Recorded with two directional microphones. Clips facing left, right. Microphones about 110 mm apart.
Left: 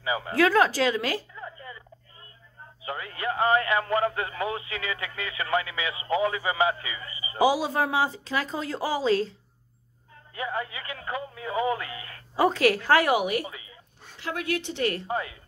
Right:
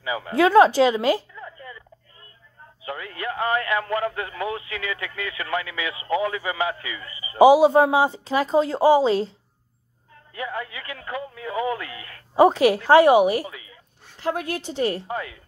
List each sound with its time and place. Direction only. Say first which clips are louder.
0.0 s speech: right 1 dB; 25° left (ahead or behind)
0.4 s speech: right 7 dB; 25° right (ahead or behind)
1.3 s a sound: right 1 dB; 25° left (ahead or behind)
2.8 s speech: right 1 dB; 25° left (ahead or behind)
7.3 s speech: right 10 dB; 20° right (ahead or behind)
10.3 s speech: right 1 dB; 25° left (ahead or behind)
12.4 s speech: right 6 dB; 20° right (ahead or behind)
13.5 s a sound: right 2 dB; 25° left (ahead or behind)
14.2 s speech: right 3 dB; 40° right (ahead or behind)
15.0 s speech: even; 25° left (ahead or behind)